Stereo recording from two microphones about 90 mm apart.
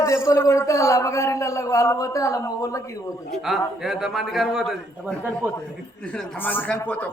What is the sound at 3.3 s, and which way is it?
A man's voice, 5° right (ahead or behind).